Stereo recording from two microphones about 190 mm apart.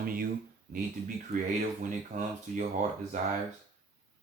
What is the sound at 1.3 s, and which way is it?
Speech, 55° right (ahead or behind).